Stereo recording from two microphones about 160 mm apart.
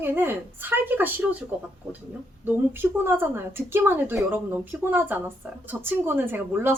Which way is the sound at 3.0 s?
15° right (ahead or behind).